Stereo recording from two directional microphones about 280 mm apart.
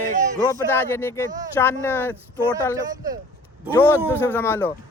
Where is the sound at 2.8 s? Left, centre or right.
Centre.